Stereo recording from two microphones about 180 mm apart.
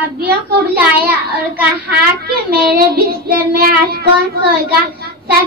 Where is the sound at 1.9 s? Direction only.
60° right (ahead or behind).